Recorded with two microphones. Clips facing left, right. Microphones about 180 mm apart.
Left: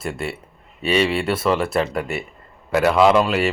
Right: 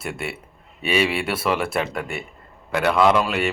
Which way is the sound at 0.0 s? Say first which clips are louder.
Left 3 dB; 5° right (ahead or behind).